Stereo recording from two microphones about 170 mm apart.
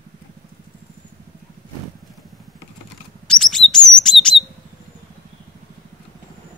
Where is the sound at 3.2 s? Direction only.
5° left (ahead or behind).